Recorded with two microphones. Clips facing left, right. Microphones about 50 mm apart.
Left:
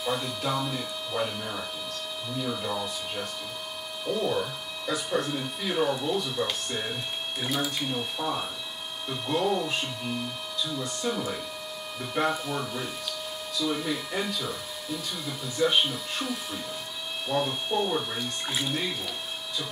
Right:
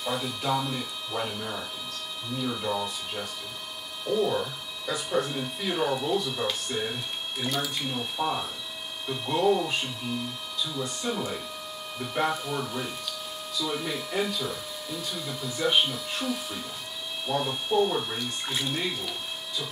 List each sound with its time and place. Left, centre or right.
0.0 s speech: centre
8.2 s speech: centre
9.0 s speech: centre